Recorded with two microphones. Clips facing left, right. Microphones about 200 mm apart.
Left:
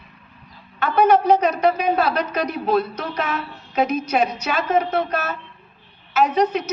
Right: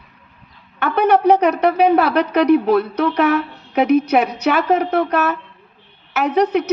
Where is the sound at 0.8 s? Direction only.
60° right (ahead or behind).